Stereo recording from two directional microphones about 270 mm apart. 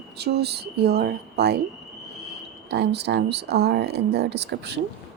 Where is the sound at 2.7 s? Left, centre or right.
Right.